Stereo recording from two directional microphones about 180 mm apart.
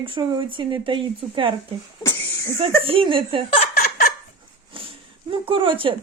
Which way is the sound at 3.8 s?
55° left (ahead or behind).